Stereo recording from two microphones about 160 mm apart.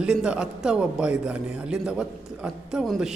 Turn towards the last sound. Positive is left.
turn(degrees=0)  # may be behind; listen again after turning